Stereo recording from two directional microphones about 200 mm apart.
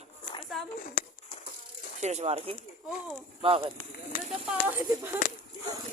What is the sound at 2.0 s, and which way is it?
Speech, 35° right (ahead or behind).